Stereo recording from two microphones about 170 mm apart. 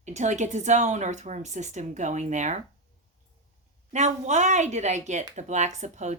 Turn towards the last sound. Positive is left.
turn(degrees=-45)  # may be behind; listen again after turning